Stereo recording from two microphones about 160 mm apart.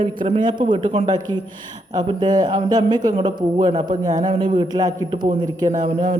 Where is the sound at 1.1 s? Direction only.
25° right (ahead or behind).